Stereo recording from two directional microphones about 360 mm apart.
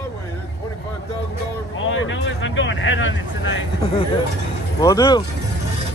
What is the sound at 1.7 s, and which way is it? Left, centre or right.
Speech, left.